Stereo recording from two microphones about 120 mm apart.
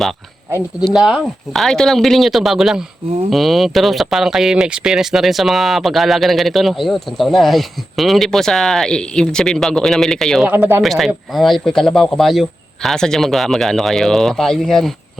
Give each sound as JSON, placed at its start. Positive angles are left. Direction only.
{"t": 0.9, "sound": "speech", "side_deg": -5}
{"t": 10.4, "sound": "speech", "side_deg": -20}
{"t": 10.8, "sound": "speech", "side_deg": 0}